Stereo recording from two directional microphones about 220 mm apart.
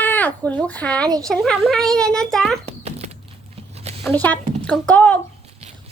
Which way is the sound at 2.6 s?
30° right (ahead or behind).